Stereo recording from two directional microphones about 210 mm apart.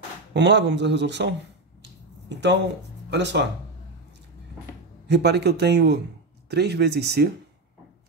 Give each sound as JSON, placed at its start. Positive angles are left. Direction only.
{"t": 0.3, "sound": "speech", "side_deg": -55}
{"t": 5.0, "sound": "a man's voice", "side_deg": -55}